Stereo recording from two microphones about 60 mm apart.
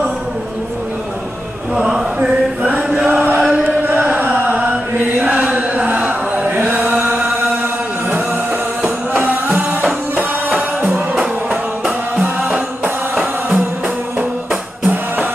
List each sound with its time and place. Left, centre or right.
1.8 s chant: centre
2.2 s a sound: centre
3.1 s chant: right
9.2 s music: right
11.8 s music: centre
12.4 s music: right